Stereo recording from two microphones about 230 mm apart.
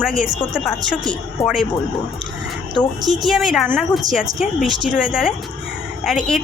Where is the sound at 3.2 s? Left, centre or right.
Centre.